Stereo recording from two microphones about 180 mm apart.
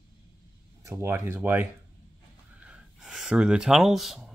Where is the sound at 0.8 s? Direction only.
15° right (ahead or behind).